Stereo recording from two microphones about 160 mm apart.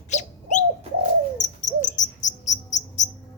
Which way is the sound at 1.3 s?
50° left (ahead or behind).